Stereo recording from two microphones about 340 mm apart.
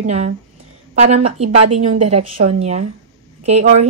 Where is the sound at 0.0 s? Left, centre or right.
Centre.